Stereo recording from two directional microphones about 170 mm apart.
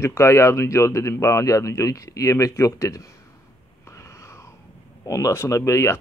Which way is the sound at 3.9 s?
15° left (ahead or behind).